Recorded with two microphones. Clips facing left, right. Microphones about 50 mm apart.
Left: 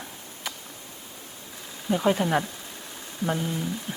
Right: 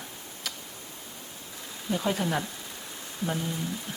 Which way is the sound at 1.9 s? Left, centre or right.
Centre.